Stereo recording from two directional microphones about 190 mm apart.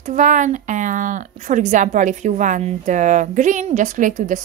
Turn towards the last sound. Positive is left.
turn(degrees=-40)  # may be behind; listen again after turning